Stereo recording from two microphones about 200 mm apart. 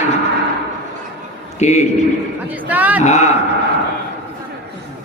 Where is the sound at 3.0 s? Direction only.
35° left (ahead or behind).